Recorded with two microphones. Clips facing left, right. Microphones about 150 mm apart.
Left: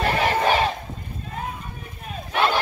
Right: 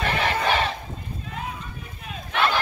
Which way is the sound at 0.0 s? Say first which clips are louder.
Left 3 dB; 40° left (ahead or behind).